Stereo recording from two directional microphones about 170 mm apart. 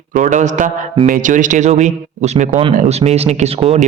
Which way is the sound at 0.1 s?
45° right (ahead or behind).